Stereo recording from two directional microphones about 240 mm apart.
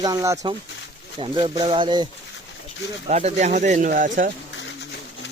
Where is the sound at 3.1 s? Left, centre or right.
Right.